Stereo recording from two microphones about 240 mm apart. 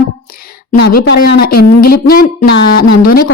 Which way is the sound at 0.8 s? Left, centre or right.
Left.